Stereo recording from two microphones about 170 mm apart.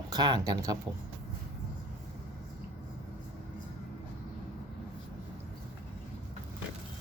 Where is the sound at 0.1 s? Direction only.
25° right (ahead or behind).